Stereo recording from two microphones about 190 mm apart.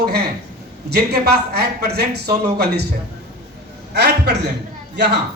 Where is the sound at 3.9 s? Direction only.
60° right (ahead or behind).